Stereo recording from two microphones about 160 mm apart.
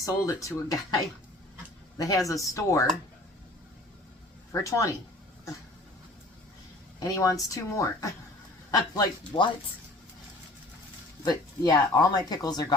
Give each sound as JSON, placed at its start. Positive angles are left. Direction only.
{"t": 0.0, "sound": "speech", "side_deg": 20}
{"t": 4.5, "sound": "speech", "side_deg": 20}
{"t": 7.0, "sound": "speech", "side_deg": 20}
{"t": 11.3, "sound": "speech", "side_deg": 25}